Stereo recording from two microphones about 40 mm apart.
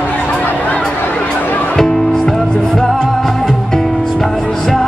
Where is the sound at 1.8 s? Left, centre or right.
Centre.